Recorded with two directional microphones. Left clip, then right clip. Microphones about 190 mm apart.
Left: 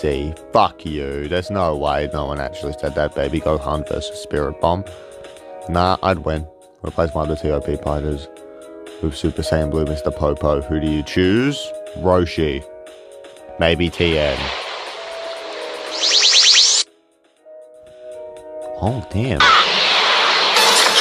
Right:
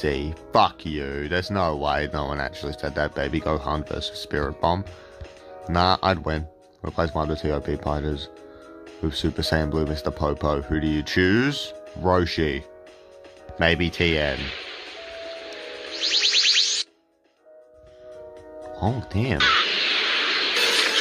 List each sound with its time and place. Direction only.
0.0 s speech: 20° left (ahead or behind)
13.6 s music: 20° left (ahead or behind)
18.6 s speech: 25° left (ahead or behind)
19.3 s a sound: 5° left (ahead or behind)